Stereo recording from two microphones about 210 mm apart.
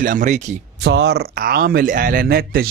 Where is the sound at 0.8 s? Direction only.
55° right (ahead or behind).